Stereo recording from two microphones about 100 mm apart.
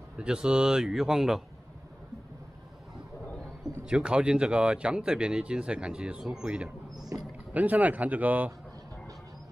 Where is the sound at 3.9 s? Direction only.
10° right (ahead or behind).